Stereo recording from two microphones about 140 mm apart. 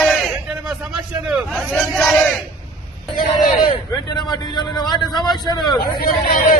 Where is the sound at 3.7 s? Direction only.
30° left (ahead or behind).